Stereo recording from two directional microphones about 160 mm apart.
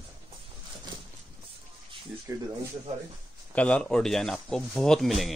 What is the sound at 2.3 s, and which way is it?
Speech, 15° right (ahead or behind).